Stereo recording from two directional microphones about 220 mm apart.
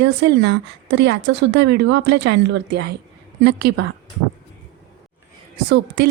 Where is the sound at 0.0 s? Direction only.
50° right (ahead or behind).